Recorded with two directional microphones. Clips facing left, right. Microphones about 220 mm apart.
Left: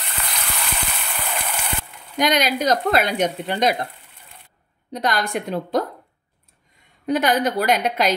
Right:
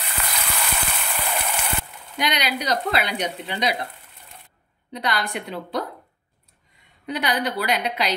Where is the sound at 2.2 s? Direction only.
45° left (ahead or behind).